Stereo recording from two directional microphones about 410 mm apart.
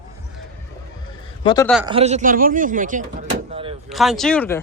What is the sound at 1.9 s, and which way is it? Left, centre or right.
Speech, centre.